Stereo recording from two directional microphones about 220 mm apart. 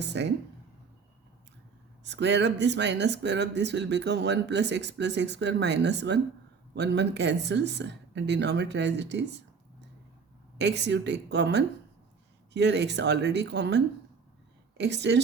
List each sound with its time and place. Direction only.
0.0 s speech: 50° right (ahead or behind)
2.0 s speech: 50° right (ahead or behind)
10.6 s speech: 50° right (ahead or behind)